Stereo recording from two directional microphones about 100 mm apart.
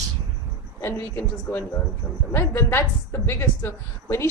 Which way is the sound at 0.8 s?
25° left (ahead or behind).